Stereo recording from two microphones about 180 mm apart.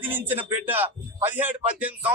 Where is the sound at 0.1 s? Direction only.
10° right (ahead or behind).